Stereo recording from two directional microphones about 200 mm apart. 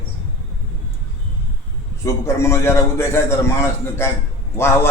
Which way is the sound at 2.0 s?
15° left (ahead or behind).